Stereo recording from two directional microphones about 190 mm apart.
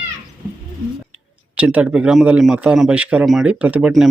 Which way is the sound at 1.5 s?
5° right (ahead or behind).